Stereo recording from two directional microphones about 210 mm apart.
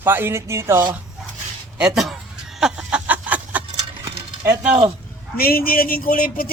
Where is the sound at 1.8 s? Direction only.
Centre (ahead or behind).